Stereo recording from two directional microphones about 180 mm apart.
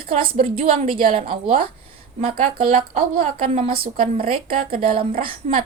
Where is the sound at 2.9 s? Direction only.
50° right (ahead or behind).